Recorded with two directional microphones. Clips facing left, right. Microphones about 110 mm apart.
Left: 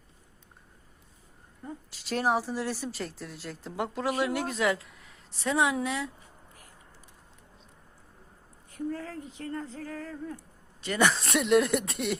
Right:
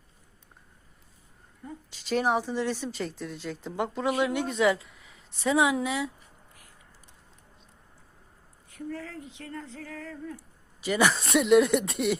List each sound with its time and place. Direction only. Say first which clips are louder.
1.9 s speech: right 2 dB; centre (ahead or behind)
8.7 s speech: left 3 dB; 40° left (ahead or behind)
10.3 s speech: left 1 dB; 5° right (ahead or behind)